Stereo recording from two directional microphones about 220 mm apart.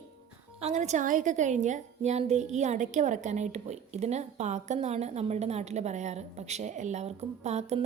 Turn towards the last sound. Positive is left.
turn(degrees=-30)  # may be behind; listen again after turning